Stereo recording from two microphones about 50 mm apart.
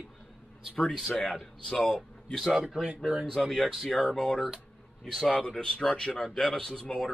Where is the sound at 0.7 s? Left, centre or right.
Centre.